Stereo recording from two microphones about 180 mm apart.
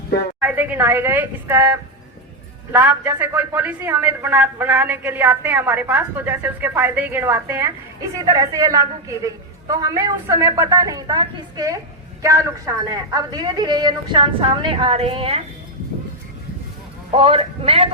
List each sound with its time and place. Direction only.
0.3 s a man's voice: 10° right (ahead or behind); by 15.4 s 35° right (ahead or behind)
17.1 s speech: 30° right (ahead or behind)